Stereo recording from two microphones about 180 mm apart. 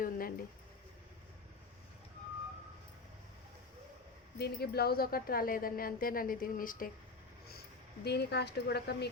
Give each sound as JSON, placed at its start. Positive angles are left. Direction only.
{"t": 0.0, "sound": "a sound", "side_deg": 55}
{"t": 4.4, "sound": "speech", "side_deg": 60}
{"t": 8.0, "sound": "speech", "side_deg": 65}